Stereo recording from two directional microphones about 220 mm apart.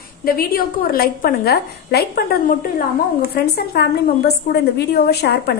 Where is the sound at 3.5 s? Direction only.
45° left (ahead or behind).